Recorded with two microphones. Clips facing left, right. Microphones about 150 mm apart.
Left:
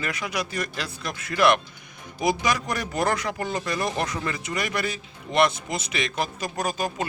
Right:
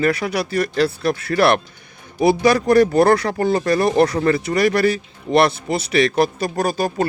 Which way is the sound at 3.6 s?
65° right (ahead or behind).